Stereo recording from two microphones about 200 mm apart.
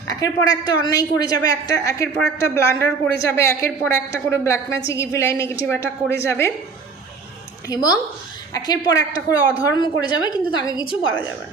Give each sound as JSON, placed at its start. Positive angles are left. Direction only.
{"t": 0.1, "sound": "a woman's voice", "side_deg": 20}
{"t": 7.7, "sound": "a woman's voice", "side_deg": 20}